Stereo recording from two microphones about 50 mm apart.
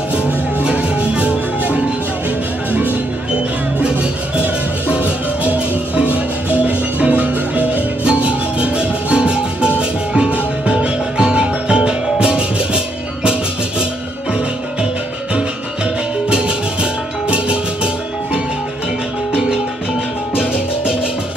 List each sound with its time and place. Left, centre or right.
0.7 s music: right
2.7 s music: right
4.9 s music: right
16.3 s music: centre